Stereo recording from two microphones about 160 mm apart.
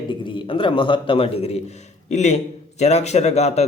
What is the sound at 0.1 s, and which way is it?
A man's voice, 30° left (ahead or behind).